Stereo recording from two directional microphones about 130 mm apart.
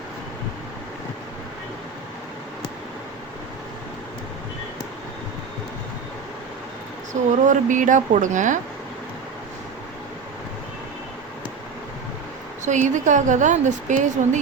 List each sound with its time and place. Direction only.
7.1 s speech: 75° right (ahead or behind)
12.6 s speech: 70° right (ahead or behind)